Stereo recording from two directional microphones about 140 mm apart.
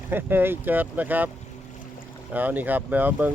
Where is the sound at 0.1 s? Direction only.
15° right (ahead or behind).